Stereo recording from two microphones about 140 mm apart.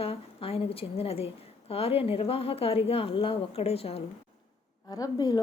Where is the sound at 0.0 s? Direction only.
45° left (ahead or behind).